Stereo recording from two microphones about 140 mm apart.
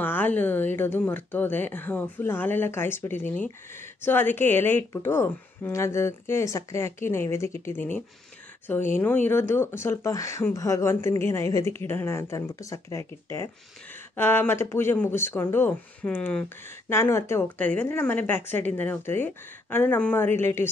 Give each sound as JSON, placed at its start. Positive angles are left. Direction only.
{"t": 0.0, "sound": "a woman's voice", "side_deg": 15}